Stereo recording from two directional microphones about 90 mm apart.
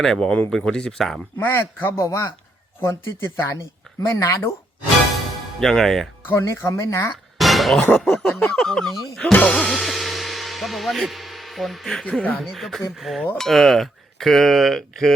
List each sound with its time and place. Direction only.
0.0 s speech: 5° left (ahead or behind)
1.4 s speech: 25° left (ahead or behind)
5.5 s speech: 5° left (ahead or behind)
6.2 s speech: 30° left (ahead or behind)
7.3 s a sound: centre (ahead or behind)
8.3 s speech: 25° left (ahead or behind)
8.5 s speech: 5° left (ahead or behind)
9.7 s music: centre (ahead or behind)
12.4 s speech: centre (ahead or behind)